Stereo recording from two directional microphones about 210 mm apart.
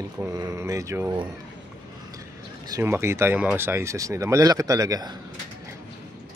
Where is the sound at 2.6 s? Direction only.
15° right (ahead or behind).